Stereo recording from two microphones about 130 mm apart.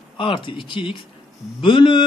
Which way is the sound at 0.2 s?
40° left (ahead or behind).